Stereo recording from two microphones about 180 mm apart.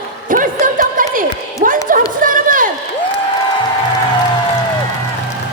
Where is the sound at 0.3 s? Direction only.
50° right (ahead or behind).